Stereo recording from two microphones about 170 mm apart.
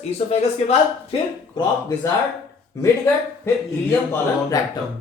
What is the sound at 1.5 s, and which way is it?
Speech, 20° left (ahead or behind).